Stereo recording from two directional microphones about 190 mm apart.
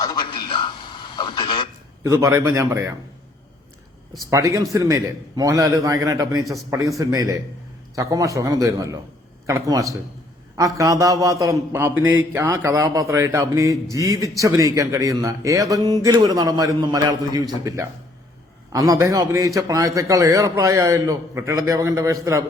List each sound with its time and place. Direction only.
0.0 s a sound: 20° left (ahead or behind)
1.1 s speech: 25° left (ahead or behind)
2.0 s a man's voice: 15° right (ahead or behind)
4.3 s a man's voice: 15° right (ahead or behind)
6.4 s a man's voice: centre (ahead or behind)
6.7 s a man's voice: 15° right (ahead or behind)